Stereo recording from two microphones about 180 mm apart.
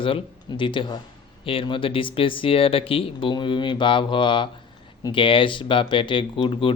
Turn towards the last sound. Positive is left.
turn(degrees=30)  # may be behind; listen again after turning